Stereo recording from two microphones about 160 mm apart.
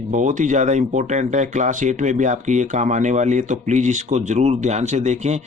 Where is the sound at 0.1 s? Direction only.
50° right (ahead or behind).